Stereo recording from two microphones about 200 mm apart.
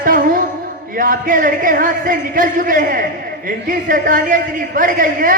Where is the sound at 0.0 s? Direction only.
45° right (ahead or behind).